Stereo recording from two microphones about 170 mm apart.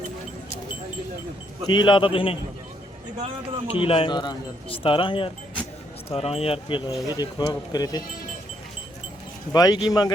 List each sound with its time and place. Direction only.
1.6 s speech: 25° left (ahead or behind)
3.7 s speech: 35° left (ahead or behind)
9.5 s speech: 20° left (ahead or behind)